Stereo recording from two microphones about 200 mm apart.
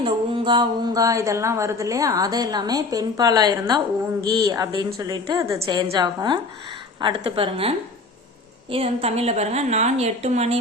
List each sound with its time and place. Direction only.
0.0 s a woman's voice: 25° right (ahead or behind)
8.7 s a woman's voice: 30° right (ahead or behind)